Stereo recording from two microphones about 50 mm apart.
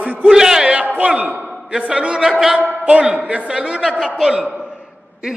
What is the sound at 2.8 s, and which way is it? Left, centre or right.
A man's voice, right.